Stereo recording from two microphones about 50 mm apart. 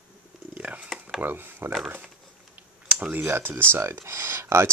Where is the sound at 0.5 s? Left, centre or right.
Right.